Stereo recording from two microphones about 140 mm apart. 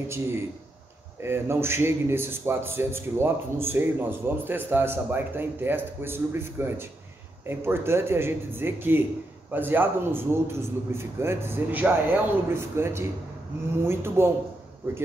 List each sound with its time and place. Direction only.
1.2 s a man's voice: 20° right (ahead or behind)